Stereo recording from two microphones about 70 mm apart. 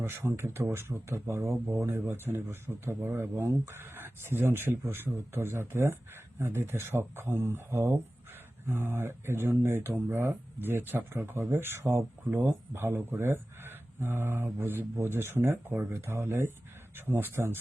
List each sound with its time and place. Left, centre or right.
0.0 s speech: right
15.9 s speech: right